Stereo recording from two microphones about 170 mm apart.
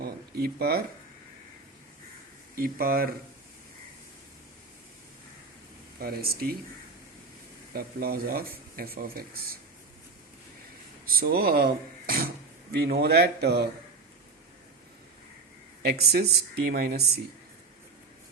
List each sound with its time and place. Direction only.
0.0 s a sound: 65° right (ahead or behind)
2.6 s speech: 60° right (ahead or behind)
6.0 s speech: 65° right (ahead or behind)
7.7 s speech: 65° right (ahead or behind)
11.1 s a man's voice: 60° right (ahead or behind)
15.8 s a man's voice: 70° right (ahead or behind)